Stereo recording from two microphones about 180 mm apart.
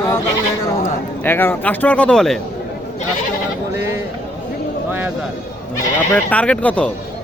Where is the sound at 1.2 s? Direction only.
10° left (ahead or behind).